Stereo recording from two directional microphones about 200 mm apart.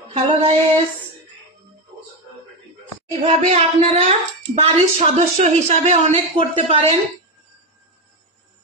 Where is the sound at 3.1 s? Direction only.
30° right (ahead or behind).